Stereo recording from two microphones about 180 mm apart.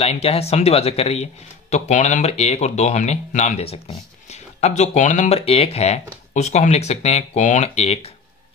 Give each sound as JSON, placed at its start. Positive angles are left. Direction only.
{"t": 0.0, "sound": "speech", "side_deg": 35}